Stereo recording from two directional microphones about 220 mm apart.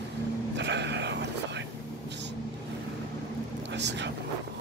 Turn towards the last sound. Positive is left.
turn(degrees=-50)  # may be behind; listen again after turning